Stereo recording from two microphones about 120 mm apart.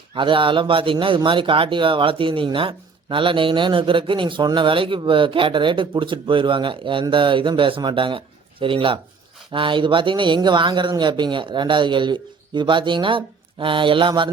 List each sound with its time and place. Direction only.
0.1 s a man's voice: 45° right (ahead or behind)